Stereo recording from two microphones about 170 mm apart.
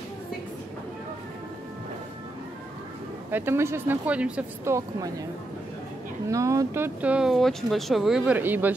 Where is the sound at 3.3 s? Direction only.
10° right (ahead or behind).